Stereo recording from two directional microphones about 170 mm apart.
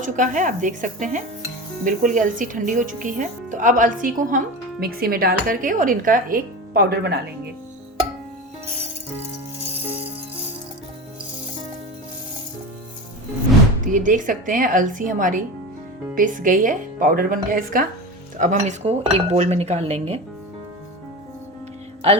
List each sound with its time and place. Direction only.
0.0 s speech: 50° right (ahead or behind); by 7.2 s 75° right (ahead or behind)
13.8 s speech: 50° right (ahead or behind)
18.3 s dishes: 45° right (ahead or behind)